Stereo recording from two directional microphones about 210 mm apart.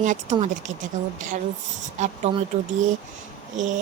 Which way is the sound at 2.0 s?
35° right (ahead or behind).